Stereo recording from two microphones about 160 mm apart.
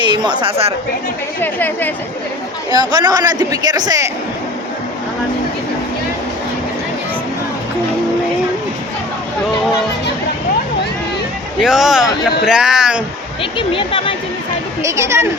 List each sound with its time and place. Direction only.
0.0 s a woman's voice: 30° right (ahead or behind)
1.4 s a woman's voice: 10° left (ahead or behind)
2.6 s speech: 25° right (ahead or behind)
11.6 s speech: 5° right (ahead or behind)
13.4 s speech: 35° left (ahead or behind)
14.8 s speech: 20° right (ahead or behind)